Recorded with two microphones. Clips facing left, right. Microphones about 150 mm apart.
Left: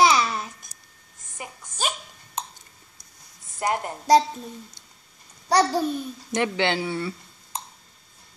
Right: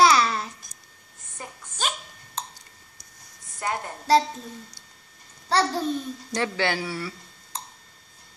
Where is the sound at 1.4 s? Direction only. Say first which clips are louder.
Left 1 dB; 15° left (ahead or behind).